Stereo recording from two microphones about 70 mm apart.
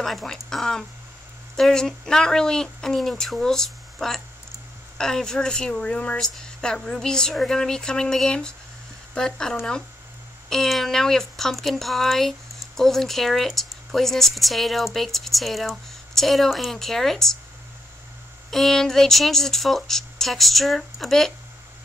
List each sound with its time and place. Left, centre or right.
0.0 s speech: centre
18.5 s speech: centre